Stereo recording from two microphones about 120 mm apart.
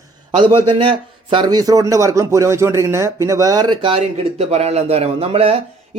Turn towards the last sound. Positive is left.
turn(degrees=-50)  # may be behind; listen again after turning